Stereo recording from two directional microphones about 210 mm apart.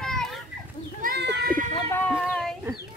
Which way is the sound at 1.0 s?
50° right (ahead or behind).